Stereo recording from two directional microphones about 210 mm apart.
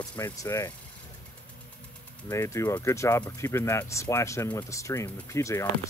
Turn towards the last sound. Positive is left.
turn(degrees=15)  # may be behind; listen again after turning